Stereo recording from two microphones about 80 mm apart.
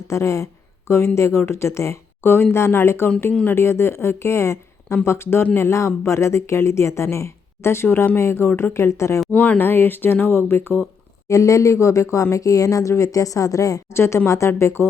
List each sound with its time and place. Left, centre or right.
0.1 s speech: left
9.3 s speech: left
11.3 s speech: left
13.9 s speech: left